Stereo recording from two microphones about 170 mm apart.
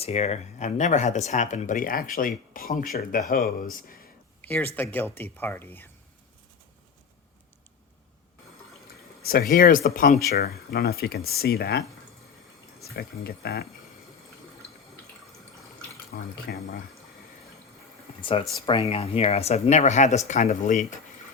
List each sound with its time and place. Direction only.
0.0 s speech: 40° left (ahead or behind); by 3.9 s 60° left (ahead or behind)
4.4 s speech: 10° left (ahead or behind)
9.2 s speech: 60° left (ahead or behind)
12.8 s speech: 65° left (ahead or behind)
16.1 s speech: 65° left (ahead or behind)
18.2 s speech: 30° left (ahead or behind)